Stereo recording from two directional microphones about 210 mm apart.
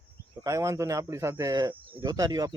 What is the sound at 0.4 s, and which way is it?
Speech, 15° right (ahead or behind).